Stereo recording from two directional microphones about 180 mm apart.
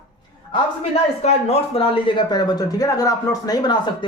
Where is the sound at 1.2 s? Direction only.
35° left (ahead or behind).